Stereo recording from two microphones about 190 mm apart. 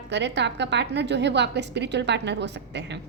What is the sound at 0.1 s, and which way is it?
A woman's voice, 65° right (ahead or behind).